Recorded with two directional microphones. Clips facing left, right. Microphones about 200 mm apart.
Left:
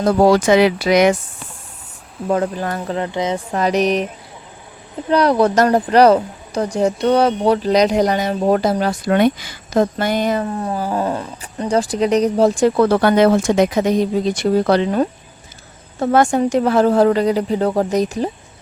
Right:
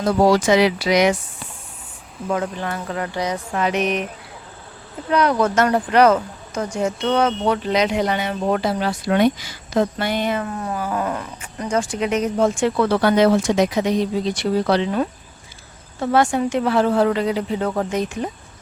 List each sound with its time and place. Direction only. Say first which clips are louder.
0.0 s speech: left 3 dB; 55° left (ahead or behind)
2.3 s speech: left 4 dB; 40° left (ahead or behind); by 3.4 s 25° left (ahead or behind)
3.5 s speech: left 5 dB; 35° left (ahead or behind)
5.0 s speech: left 4 dB; 35° left (ahead or behind)